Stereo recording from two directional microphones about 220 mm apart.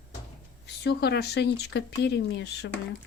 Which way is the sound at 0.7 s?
50° left (ahead or behind).